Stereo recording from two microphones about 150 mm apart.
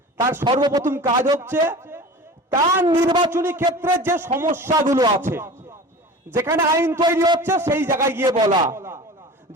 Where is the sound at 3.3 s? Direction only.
15° right (ahead or behind).